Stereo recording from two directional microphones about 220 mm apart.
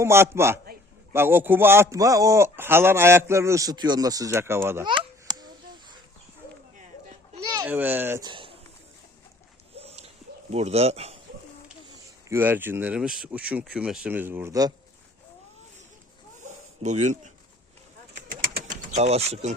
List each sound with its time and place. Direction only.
0.0 s a man's voice: 10° right (ahead or behind)
4.9 s a sound: 20° right (ahead or behind)
7.5 s a child's voice: 10° right (ahead or behind)
9.7 s dog: 30° right (ahead or behind)
10.5 s speech: 30° right (ahead or behind)
12.3 s a man's voice: 10° right (ahead or behind)
16.4 s a sound: 30° right (ahead or behind)
18.3 s bird: 40° right (ahead or behind)